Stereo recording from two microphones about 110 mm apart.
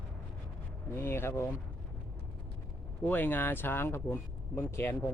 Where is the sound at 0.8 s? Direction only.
20° left (ahead or behind).